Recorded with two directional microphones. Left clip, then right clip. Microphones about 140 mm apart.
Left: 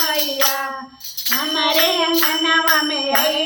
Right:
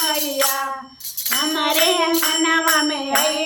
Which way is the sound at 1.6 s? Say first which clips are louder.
Left 1 dB; 20° right (ahead or behind).